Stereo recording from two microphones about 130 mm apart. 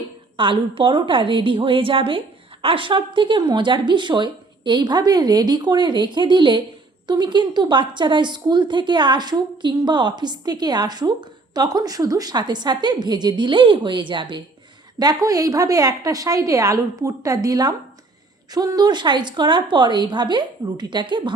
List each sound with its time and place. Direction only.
0.3 s a woman's voice: 40° right (ahead or behind)